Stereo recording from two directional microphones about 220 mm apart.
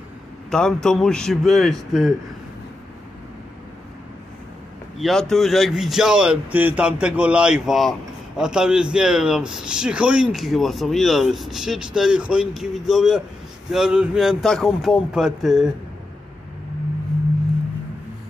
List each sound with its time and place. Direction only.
0.5 s speech: 5° left (ahead or behind)
4.9 s speech: centre (ahead or behind)